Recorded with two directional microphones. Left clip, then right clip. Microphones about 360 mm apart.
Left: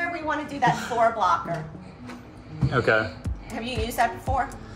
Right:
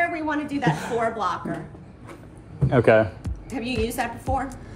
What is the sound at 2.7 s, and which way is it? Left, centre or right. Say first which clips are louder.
Speech: right 5 dB; centre.